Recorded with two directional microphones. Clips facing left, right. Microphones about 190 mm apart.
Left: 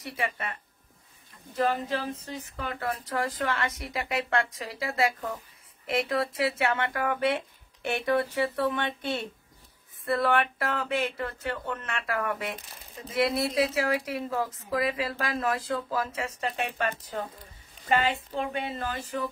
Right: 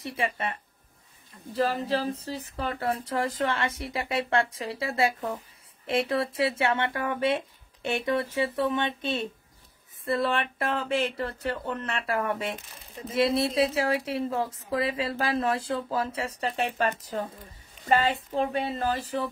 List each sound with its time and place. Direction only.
0.0 s a woman's voice: 30° right (ahead or behind)